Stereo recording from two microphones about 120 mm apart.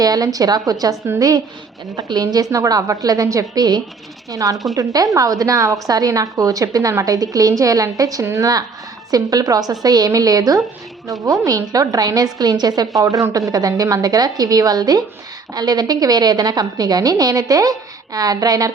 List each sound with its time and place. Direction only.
0.0 s a woman's voice: 30° right (ahead or behind)
2.1 s a woman's voice: 30° right (ahead or behind)